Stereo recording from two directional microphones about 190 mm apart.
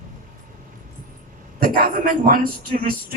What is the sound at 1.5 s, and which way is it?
A woman's voice, 50° right (ahead or behind).